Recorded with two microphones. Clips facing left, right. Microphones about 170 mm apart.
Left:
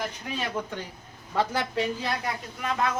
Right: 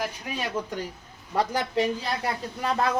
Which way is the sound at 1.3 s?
15° right (ahead or behind).